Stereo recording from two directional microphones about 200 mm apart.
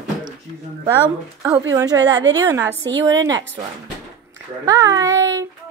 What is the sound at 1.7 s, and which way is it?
A woman's voice, 20° right (ahead or behind).